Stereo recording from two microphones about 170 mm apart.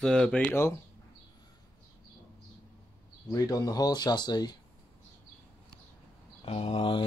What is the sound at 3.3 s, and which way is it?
Speech, 20° left (ahead or behind).